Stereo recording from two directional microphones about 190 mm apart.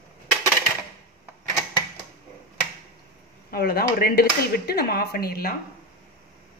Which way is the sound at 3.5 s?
55° left (ahead or behind).